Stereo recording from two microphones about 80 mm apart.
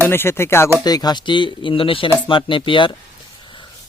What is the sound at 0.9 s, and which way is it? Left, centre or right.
Speech, left.